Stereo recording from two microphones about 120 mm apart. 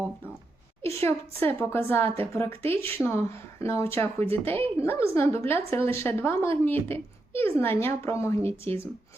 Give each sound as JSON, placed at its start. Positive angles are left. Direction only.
{"t": 0.8, "sound": "a woman's voice", "side_deg": 20}